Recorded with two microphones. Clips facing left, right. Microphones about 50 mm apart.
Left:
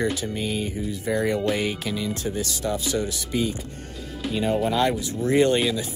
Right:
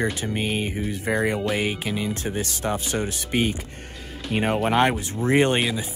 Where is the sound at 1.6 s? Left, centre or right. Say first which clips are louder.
Right 1 dB; right.